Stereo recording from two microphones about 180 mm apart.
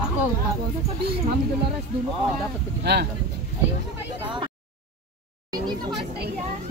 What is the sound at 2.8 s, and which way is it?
Speech, 65° right (ahead or behind).